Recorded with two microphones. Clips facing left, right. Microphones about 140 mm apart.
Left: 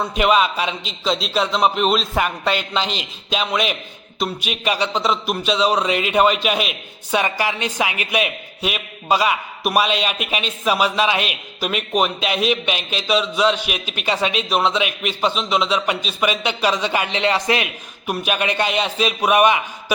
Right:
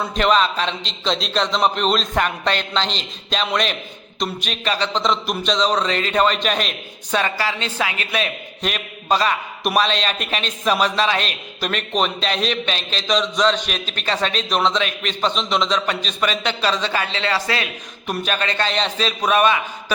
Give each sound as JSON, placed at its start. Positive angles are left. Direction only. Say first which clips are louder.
{"t": 0.1, "sound": "speech", "louder": "even", "side_deg": 10}